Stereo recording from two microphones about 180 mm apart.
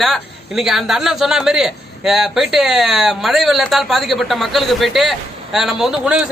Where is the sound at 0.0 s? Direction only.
Centre (ahead or behind).